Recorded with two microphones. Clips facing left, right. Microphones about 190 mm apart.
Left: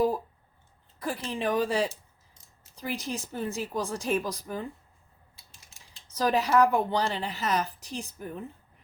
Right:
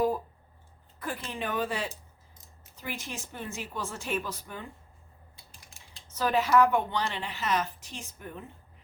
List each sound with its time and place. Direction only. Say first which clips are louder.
0.9 s a woman's voice: left 4 dB; 35° left (ahead or behind)
6.1 s a woman's voice: left 1 dB; 40° left (ahead or behind)